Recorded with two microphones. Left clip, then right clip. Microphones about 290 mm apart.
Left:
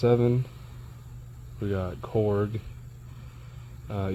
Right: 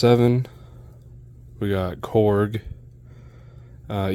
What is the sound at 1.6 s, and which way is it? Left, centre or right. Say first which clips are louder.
Speech: right 7 dB; right.